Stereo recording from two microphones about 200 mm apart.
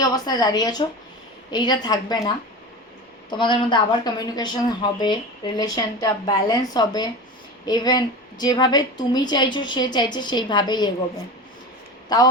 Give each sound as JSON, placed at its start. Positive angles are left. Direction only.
{"t": 0.0, "sound": "a woman's voice", "side_deg": 20}
{"t": 12.0, "sound": "speech", "side_deg": 20}